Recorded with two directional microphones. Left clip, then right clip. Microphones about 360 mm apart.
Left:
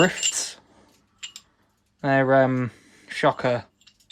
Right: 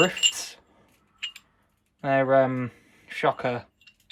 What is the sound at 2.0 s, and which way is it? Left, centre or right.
Speech, left.